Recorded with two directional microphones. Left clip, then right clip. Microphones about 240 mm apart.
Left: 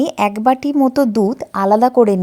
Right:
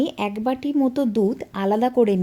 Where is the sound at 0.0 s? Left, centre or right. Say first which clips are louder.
Left 9 dB; left.